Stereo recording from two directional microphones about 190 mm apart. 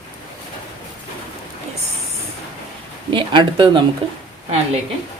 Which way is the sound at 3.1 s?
25° right (ahead or behind).